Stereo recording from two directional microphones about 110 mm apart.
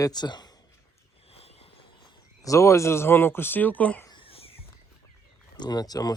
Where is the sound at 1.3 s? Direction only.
65° left (ahead or behind).